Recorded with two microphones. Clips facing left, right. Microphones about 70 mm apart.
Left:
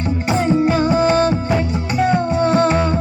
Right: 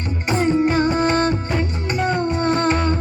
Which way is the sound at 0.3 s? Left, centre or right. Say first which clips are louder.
Left 1 dB; centre.